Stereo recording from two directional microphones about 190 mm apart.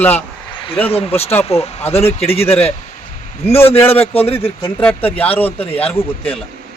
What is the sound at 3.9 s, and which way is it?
Speech, 30° left (ahead or behind).